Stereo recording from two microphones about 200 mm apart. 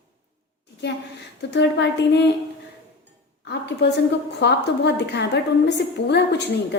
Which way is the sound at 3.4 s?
60° left (ahead or behind).